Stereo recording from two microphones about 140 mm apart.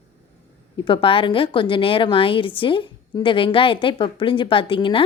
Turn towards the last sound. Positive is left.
turn(degrees=40)  # may be behind; listen again after turning